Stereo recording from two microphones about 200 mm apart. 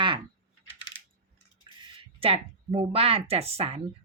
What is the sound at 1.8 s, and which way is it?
Speech, 30° right (ahead or behind).